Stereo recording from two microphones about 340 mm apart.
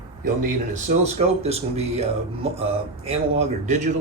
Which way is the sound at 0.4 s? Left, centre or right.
Centre.